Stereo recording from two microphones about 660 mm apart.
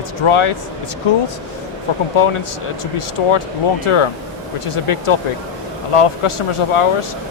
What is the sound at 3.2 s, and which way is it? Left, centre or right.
Speech, left.